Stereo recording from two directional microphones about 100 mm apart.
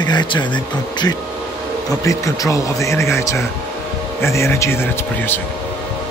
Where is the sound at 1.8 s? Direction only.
35° left (ahead or behind).